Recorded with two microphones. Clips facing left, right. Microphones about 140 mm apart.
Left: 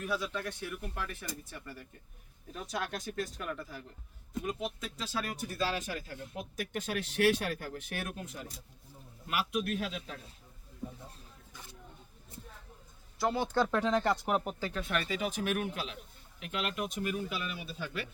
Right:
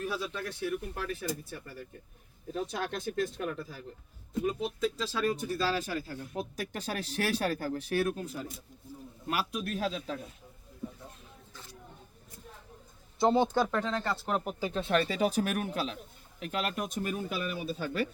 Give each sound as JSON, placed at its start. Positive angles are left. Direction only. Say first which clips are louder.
{"t": 0.0, "sound": "speech", "louder": "even", "side_deg": -30}
{"t": 5.5, "sound": "speech", "louder": "right 3 dB", "side_deg": -35}
{"t": 13.1, "sound": "speech", "louder": "right 5 dB", "side_deg": -25}
{"t": 13.7, "sound": "speech", "louder": "left 3 dB", "side_deg": 10}
{"t": 14.6, "sound": "speech", "louder": "right 6 dB", "side_deg": -25}